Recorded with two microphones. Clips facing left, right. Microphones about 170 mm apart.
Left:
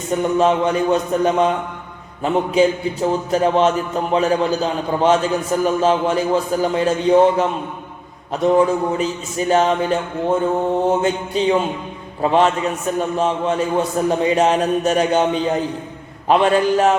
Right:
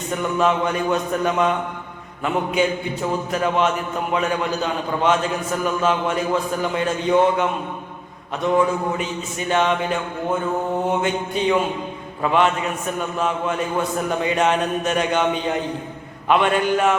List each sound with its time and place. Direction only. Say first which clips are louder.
0.1 s a man's voice: left 4 dB; 30° left (ahead or behind)
11.0 s a man's voice: left 3 dB; 30° left (ahead or behind)
16.3 s a man's voice: left 3 dB; 35° left (ahead or behind)